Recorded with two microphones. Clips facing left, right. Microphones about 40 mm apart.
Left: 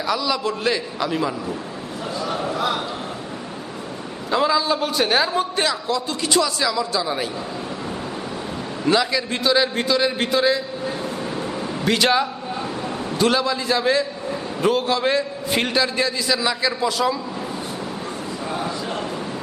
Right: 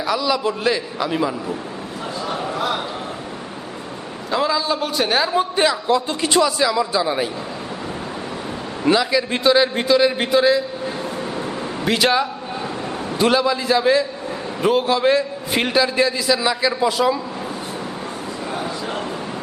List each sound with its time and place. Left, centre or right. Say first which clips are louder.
0.0 s a man's voice: right 2 dB; centre
2.2 s a sound: even; centre
4.3 s a man's voice: left 1 dB; centre
5.9 s speech: right 3 dB; right
6.4 s a man's voice: right 4 dB; centre
8.9 s a man's voice: right 2 dB; centre